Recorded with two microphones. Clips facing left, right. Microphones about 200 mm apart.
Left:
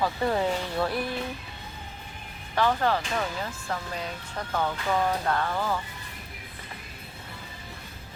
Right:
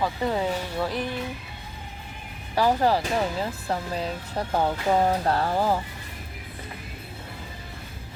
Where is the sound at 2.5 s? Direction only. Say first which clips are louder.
Right 3 dB; 35° right (ahead or behind).